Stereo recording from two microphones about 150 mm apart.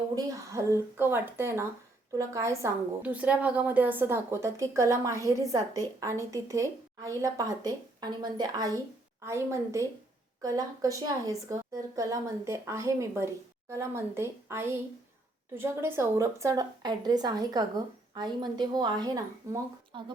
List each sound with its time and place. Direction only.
0.2 s a woman's voice: 20° right (ahead or behind)
19.9 s speech: 35° right (ahead or behind)